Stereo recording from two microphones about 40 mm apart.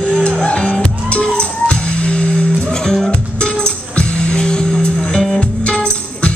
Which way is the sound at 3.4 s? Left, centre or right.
Left.